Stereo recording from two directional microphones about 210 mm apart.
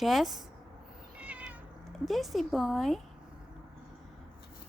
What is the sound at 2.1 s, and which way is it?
Speech, centre (ahead or behind).